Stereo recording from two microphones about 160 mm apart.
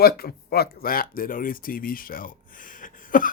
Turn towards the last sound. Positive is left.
turn(degrees=60)  # may be behind; listen again after turning